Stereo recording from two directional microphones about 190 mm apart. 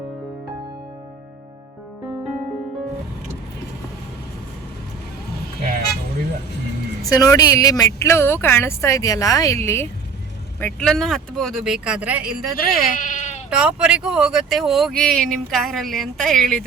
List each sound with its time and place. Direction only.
7.1 s a woman's voice: 20° left (ahead or behind); by 12.5 s 5° right (ahead or behind)
12.5 s speech: 45° left (ahead or behind)
13.5 s speech: 5° right (ahead or behind)